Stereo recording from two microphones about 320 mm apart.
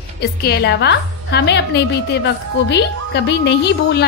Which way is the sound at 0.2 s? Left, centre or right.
Left.